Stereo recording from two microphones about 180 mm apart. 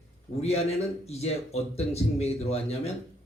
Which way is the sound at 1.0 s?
35° left (ahead or behind).